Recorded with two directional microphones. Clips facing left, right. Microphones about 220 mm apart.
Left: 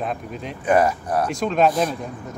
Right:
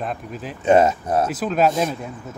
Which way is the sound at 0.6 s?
25° right (ahead or behind).